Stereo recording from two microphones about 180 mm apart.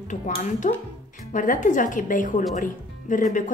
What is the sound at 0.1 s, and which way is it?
Speech, 40° left (ahead or behind).